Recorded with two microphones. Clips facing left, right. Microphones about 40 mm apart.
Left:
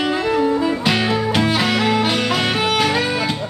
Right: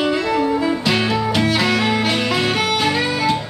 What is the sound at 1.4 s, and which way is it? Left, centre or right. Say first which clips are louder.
Music: even; left.